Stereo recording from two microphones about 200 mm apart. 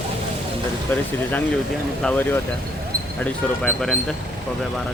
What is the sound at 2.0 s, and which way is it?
Speech, 10° left (ahead or behind).